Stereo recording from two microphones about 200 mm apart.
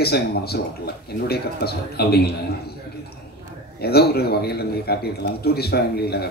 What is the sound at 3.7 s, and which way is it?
A man's voice, 50° left (ahead or behind).